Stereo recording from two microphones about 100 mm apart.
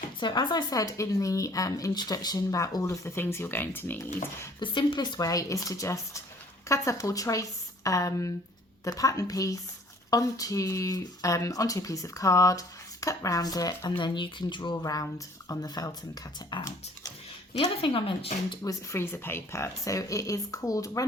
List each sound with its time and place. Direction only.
0.2 s speech: 50° left (ahead or behind); by 4.0 s 20° left (ahead or behind)
4.6 s speech: 55° left (ahead or behind)
14.0 s speech: 50° left (ahead or behind)
17.7 s speech: 65° left (ahead or behind); by 18.3 s 80° left
18.6 s speech: 30° left (ahead or behind)